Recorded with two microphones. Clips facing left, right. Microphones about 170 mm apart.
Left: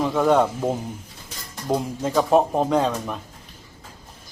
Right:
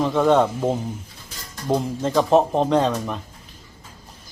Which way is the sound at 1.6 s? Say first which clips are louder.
Right 2 dB; 5° left (ahead or behind).